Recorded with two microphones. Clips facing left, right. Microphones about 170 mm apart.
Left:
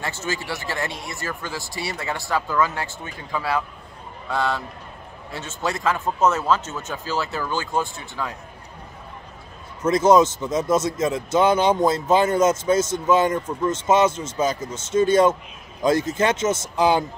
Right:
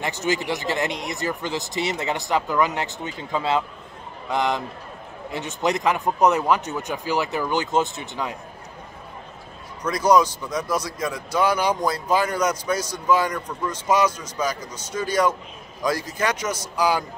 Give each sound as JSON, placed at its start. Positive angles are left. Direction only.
{"t": 0.0, "sound": "speech", "side_deg": -15}
{"t": 9.8, "sound": "a man's voice", "side_deg": 25}